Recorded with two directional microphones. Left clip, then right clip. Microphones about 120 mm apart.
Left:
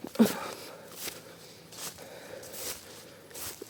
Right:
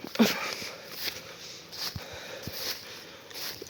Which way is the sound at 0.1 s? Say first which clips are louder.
Right 2 dB; 45° left (ahead or behind).